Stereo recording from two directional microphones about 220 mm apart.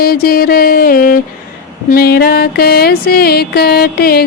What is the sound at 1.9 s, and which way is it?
Music, 45° left (ahead or behind).